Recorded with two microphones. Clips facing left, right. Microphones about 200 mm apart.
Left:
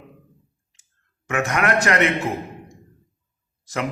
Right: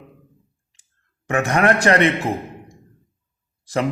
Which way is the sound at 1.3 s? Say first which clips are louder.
Right 4 dB; 35° right (ahead or behind).